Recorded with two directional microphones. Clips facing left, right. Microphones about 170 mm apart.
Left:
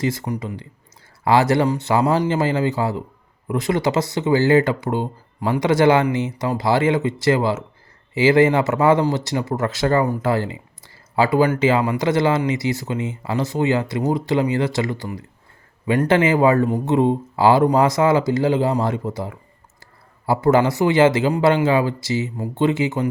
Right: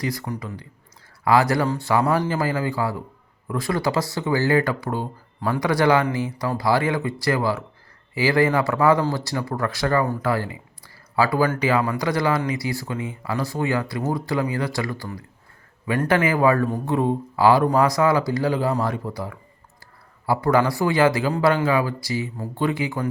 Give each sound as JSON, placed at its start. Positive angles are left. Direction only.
{"t": 0.0, "sound": "speech", "side_deg": 25}